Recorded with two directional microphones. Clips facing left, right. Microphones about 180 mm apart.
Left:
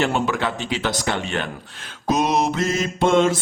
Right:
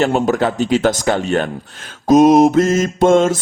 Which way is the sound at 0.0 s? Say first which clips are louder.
Right 6 dB; 40° right (ahead or behind).